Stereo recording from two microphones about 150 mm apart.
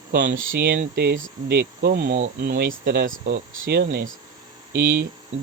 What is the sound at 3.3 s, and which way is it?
Speech, 90° right.